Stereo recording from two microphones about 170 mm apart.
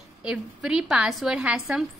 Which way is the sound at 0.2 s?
5° right (ahead or behind).